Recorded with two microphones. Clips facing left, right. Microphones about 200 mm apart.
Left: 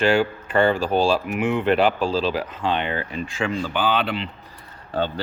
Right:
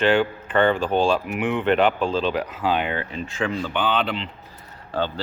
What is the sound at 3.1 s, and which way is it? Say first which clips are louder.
Speech: left 1 dB; 10° left (ahead or behind).